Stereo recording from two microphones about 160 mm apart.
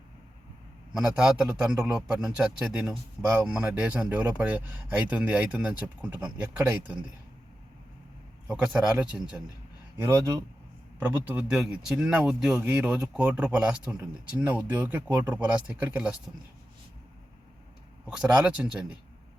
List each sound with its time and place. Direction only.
0.9 s a man's voice: 5° right (ahead or behind)
8.4 s speech: 5° right (ahead or behind)
10.0 s a man's voice: 20° right (ahead or behind)
18.1 s speech: 5° right (ahead or behind)